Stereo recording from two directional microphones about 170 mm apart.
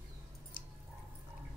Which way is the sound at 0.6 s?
55° left (ahead or behind).